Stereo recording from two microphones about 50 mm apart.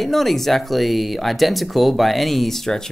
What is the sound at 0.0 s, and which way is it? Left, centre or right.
Speech, centre.